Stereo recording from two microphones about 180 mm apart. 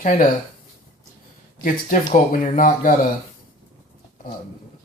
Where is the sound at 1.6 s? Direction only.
50° left (ahead or behind).